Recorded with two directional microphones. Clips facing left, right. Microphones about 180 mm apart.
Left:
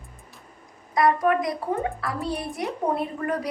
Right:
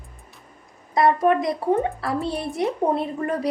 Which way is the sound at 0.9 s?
25° right (ahead or behind).